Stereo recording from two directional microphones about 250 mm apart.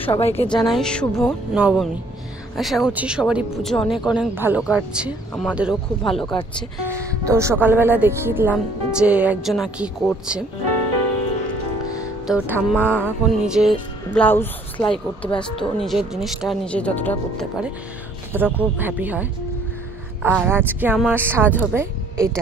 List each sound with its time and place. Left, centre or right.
0.1 s a woman's voice: left
0.6 s music: centre
6.2 s a woman's voice: centre
7.2 s speech: centre
7.6 s music: centre
12.3 s music: centre
18.3 s speech: centre